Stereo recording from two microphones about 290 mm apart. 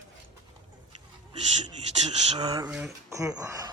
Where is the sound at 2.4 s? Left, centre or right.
Centre.